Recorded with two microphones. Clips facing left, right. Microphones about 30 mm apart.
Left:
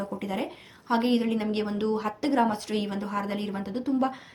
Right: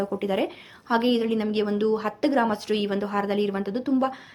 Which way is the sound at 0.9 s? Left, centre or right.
Centre.